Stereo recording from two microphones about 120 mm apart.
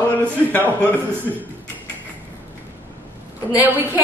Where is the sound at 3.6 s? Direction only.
20° right (ahead or behind).